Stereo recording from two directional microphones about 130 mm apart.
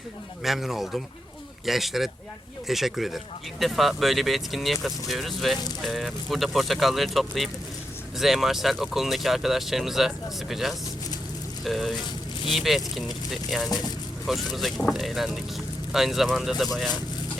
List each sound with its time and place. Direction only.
0.4 s speech: centre (ahead or behind)
13.7 s speech: 30° left (ahead or behind)
14.3 s speech: centre (ahead or behind)